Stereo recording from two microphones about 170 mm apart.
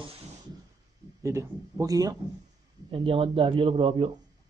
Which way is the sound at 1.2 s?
20° right (ahead or behind).